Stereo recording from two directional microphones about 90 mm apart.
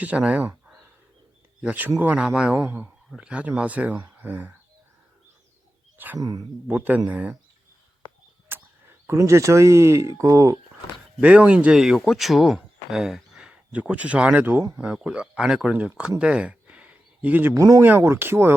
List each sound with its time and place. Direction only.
0.0 s speech: 15° right (ahead or behind)
1.6 s speech: 15° right (ahead or behind)
2.6 s speech: 20° right (ahead or behind)
6.1 s speech: 40° right (ahead or behind)
6.7 s speech: 20° right (ahead or behind)
8.5 s a sound: 20° right (ahead or behind)
9.0 s speech: 30° right (ahead or behind)
11.2 s speech: 15° right (ahead or behind)
17.5 s speech: 40° right (ahead or behind)
17.7 s speech: 25° right (ahead or behind)